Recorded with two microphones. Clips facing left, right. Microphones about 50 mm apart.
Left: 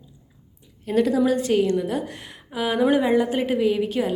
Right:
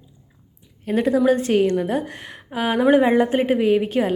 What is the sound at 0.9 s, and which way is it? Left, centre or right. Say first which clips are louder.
A woman's voice: right 2 dB; right.